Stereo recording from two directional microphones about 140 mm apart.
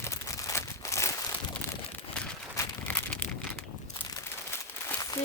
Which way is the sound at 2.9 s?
10° left (ahead or behind).